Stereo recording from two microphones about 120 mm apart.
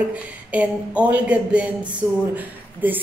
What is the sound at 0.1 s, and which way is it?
A woman's voice, 10° right (ahead or behind).